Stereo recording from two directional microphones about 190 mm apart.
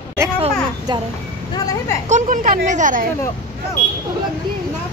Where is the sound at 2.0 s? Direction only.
40° right (ahead or behind).